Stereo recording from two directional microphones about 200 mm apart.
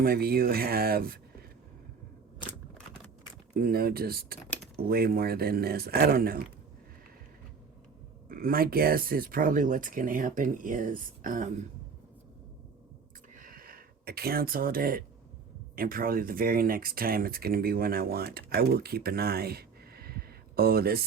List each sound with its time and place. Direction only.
0.0 s speech: 50° right (ahead or behind)
3.6 s speech: 50° right (ahead or behind)
4.4 s typing: 5° left (ahead or behind)
4.8 s speech: 50° right (ahead or behind)
8.3 s speech: 45° right (ahead or behind)
13.3 s a sound: 45° right (ahead or behind)
15.7 s speech: 45° right (ahead or behind)